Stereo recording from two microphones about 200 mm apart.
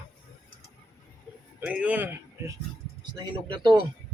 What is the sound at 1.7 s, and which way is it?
Speech, 5° right (ahead or behind).